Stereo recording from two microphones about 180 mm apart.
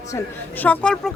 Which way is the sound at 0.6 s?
5° left (ahead or behind).